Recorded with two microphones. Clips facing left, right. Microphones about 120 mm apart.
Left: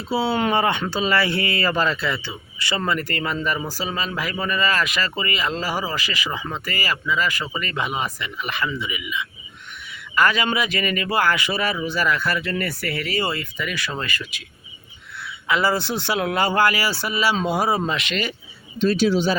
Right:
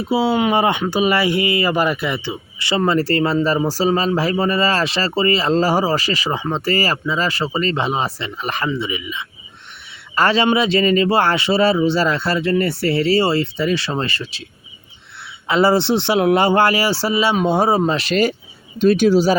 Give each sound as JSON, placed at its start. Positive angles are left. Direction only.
{"t": 0.0, "sound": "speech", "side_deg": -15}